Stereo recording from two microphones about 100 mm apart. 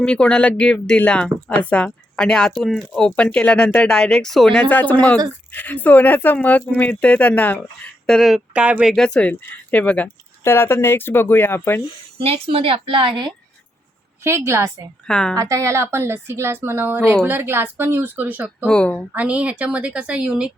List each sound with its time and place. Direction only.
0.0 s speech: 10° left (ahead or behind)
4.7 s speech: 15° left (ahead or behind)
8.0 s speech: 5° left (ahead or behind)
8.5 s speech: 10° right (ahead or behind)
8.9 s speech: 5° left (ahead or behind)
10.4 s speech: 25° left (ahead or behind)
12.2 s a woman's voice: 75° right (ahead or behind); by 13.3 s 55° right (ahead or behind)
14.3 s speech: 25° right (ahead or behind)
15.0 s speech: 5° left (ahead or behind)
15.4 s speech: 35° right (ahead or behind); by 18.5 s 15° right (ahead or behind)
18.6 s speech: 10° left (ahead or behind)
19.1 s speech: 15° right (ahead or behind)